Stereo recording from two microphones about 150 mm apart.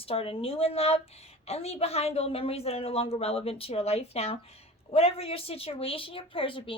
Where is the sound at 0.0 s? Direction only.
40° left (ahead or behind).